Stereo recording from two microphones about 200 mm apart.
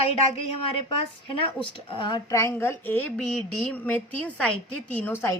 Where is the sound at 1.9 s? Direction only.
25° left (ahead or behind).